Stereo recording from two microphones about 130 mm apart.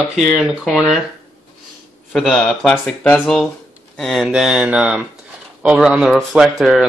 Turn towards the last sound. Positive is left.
turn(degrees=0)  # may be behind; listen again after turning